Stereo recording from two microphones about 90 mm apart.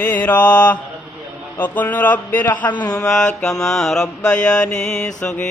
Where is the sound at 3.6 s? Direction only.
5° left (ahead or behind).